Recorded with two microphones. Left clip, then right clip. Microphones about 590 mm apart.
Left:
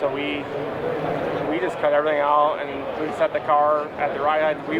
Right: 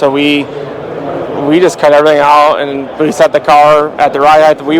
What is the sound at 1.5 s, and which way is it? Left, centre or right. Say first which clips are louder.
Speech: right 16 dB; right.